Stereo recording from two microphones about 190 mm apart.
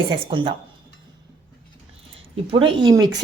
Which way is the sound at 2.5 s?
25° right (ahead or behind).